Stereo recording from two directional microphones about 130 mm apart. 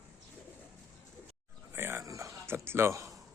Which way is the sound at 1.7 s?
20° right (ahead or behind).